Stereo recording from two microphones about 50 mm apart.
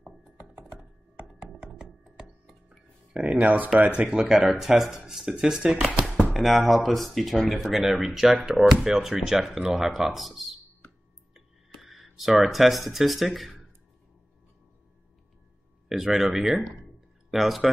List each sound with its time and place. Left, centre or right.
1.7 s music: centre
2.1 s music: centre
3.1 s a sound: centre
3.3 s speech: right
3.9 s speech: centre
6.3 s speech: centre
11.7 s speech: centre
15.9 s speech: centre